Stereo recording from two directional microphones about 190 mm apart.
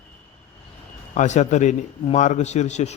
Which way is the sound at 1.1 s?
40° left (ahead or behind).